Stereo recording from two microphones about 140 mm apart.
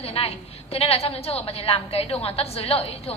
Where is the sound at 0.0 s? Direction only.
45° left (ahead or behind).